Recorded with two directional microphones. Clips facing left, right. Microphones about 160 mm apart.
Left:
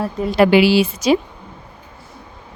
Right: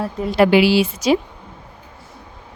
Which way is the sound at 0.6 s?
90° left.